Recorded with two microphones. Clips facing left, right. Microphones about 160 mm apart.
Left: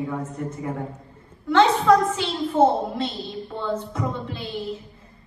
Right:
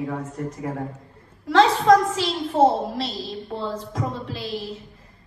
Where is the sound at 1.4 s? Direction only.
35° right (ahead or behind).